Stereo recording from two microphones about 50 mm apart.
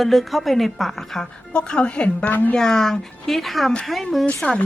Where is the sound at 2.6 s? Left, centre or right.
Centre.